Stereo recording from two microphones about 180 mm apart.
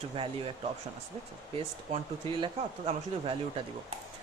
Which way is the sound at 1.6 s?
30° right (ahead or behind).